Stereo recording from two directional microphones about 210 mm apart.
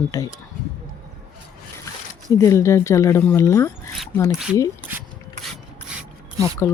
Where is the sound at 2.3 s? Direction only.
15° left (ahead or behind).